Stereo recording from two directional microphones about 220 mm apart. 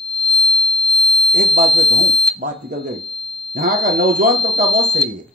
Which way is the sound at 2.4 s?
40° right (ahead or behind).